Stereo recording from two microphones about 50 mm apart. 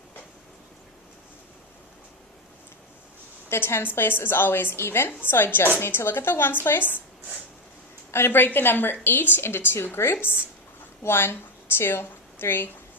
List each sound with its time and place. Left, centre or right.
3.5 s a woman's voice: left
3.9 s a woman's voice: left
8.1 s a woman's voice: left